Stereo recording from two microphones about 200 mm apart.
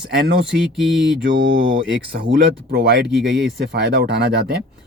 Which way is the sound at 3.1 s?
5° right (ahead or behind).